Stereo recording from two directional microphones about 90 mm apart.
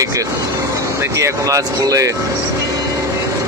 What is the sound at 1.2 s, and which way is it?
Speech, 40° right (ahead or behind).